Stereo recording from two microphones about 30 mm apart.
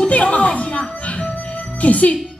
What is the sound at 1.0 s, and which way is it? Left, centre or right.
Music, left.